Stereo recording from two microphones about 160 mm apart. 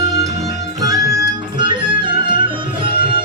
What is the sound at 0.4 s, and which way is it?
Music, 20° right (ahead or behind).